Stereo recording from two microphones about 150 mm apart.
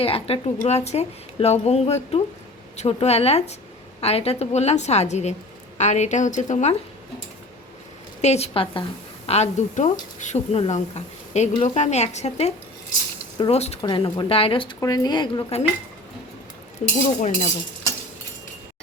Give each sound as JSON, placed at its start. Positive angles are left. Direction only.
{"t": 0.0, "sound": "speech", "side_deg": 40}
{"t": 8.2, "sound": "speech", "side_deg": 45}
{"t": 13.8, "sound": "speech", "side_deg": 35}
{"t": 14.8, "sound": "speech", "side_deg": 25}
{"t": 16.8, "sound": "speech", "side_deg": 50}